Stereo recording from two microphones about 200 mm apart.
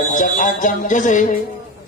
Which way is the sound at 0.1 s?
40° left (ahead or behind).